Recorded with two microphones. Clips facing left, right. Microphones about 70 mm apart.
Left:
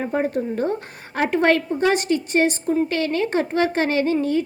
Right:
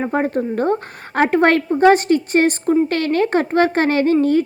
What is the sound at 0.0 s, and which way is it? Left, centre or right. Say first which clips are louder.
A woman's voice: right 3 dB; right.